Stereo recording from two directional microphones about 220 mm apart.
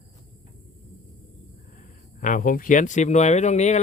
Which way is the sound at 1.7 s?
35° left (ahead or behind).